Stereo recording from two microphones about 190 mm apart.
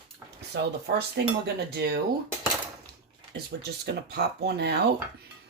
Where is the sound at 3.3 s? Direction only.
60° right (ahead or behind).